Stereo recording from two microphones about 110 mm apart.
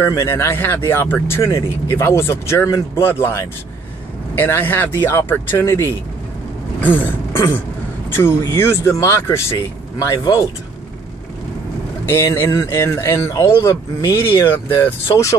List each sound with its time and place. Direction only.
0.0 s speech: 25° left (ahead or behind)
4.4 s throat clearing: 15° left (ahead or behind)
4.9 s speech: 25° left (ahead or behind)
6.8 s throat clearing: 15° left (ahead or behind)
8.1 s speech: 20° left (ahead or behind)
12.1 s speech: 25° left (ahead or behind)